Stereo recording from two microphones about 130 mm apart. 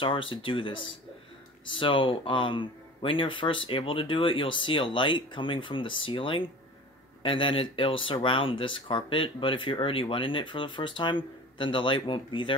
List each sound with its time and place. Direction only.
0.0 s speech: 40° left (ahead or behind)